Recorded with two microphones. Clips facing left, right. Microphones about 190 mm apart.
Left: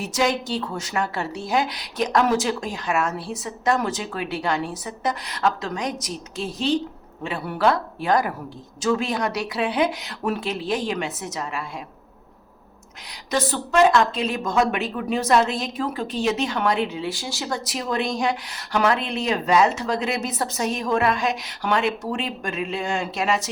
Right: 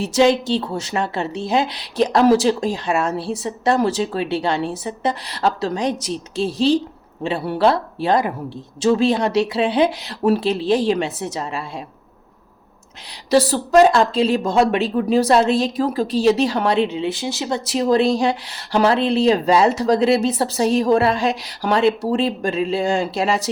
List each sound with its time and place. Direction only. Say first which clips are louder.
0.0 s a woman's voice: right 7 dB; 30° right (ahead or behind)
13.3 s speech: right 8 dB; 35° right (ahead or behind)